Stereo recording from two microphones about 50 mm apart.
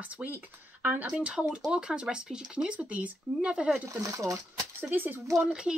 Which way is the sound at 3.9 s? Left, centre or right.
Right.